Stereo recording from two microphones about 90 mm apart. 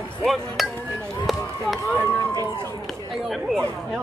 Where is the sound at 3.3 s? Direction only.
Centre (ahead or behind).